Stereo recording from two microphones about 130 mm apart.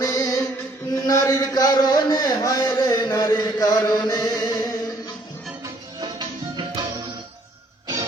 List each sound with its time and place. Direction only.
0.0 s music: 25° left (ahead or behind)
0.9 s chant: 25° left (ahead or behind)
3.8 s music: 30° left (ahead or behind)
5.6 s music: 30° right (ahead or behind)